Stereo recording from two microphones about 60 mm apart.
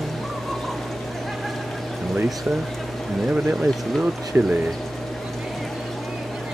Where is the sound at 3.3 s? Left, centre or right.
Centre.